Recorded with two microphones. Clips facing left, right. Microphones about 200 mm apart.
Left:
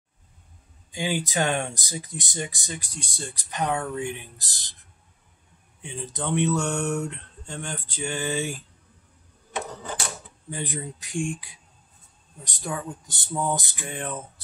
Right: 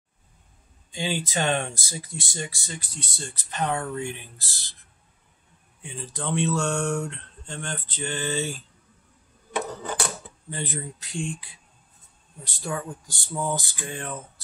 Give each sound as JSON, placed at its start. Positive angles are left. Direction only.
{"t": 0.9, "sound": "speech", "side_deg": 15}
{"t": 5.8, "sound": "speech", "side_deg": 20}
{"t": 10.5, "sound": "speech", "side_deg": 15}